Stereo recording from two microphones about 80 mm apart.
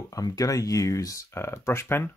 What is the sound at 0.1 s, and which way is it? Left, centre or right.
Speech, left.